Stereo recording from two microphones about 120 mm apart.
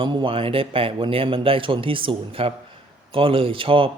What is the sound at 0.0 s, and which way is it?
Speech, 40° right (ahead or behind).